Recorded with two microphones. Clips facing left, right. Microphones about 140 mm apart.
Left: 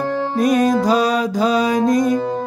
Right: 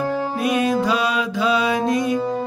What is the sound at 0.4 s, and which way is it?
Music, 40° left (ahead or behind).